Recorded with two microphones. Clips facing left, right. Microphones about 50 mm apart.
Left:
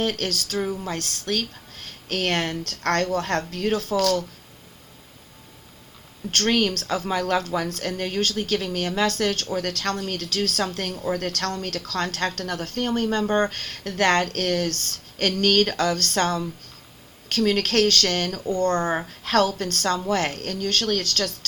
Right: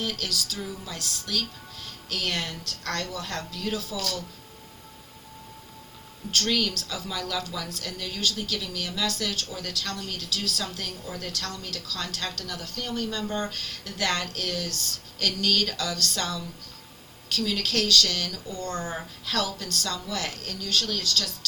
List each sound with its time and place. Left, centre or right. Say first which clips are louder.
0.0 s a woman's voice: left 6 dB; left
6.3 s a woman's voice: left 5 dB; left